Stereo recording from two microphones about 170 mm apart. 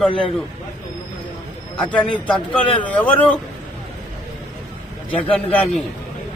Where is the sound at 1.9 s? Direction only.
5° left (ahead or behind).